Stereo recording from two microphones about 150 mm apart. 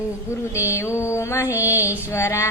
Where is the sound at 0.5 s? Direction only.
20° left (ahead or behind).